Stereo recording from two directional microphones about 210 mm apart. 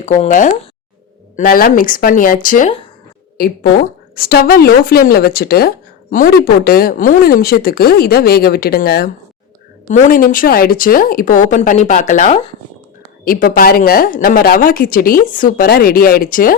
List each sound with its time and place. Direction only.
0.0 s a woman's voice: 35° left (ahead or behind)